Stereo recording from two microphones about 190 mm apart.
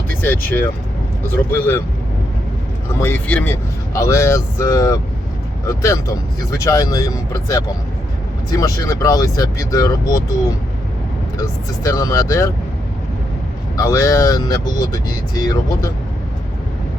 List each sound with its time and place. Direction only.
0.2 s speech: 10° left (ahead or behind)
3.0 s speech: 10° left (ahead or behind)
11.3 s speech: 20° left (ahead or behind)
13.7 s speech: 15° left (ahead or behind)